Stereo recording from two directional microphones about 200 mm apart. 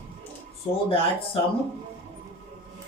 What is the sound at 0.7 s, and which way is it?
Speech, 25° left (ahead or behind).